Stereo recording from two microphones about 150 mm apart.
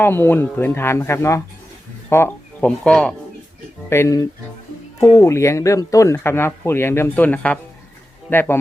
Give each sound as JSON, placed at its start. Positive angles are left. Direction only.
{"t": 0.0, "sound": "speech", "side_deg": 15}
{"t": 3.8, "sound": "speech", "side_deg": 20}